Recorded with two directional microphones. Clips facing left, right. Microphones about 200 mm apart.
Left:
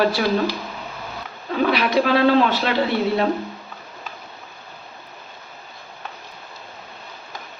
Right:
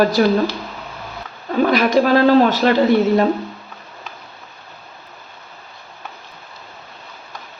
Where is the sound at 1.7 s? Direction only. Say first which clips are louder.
Right 4 dB; 45° right (ahead or behind).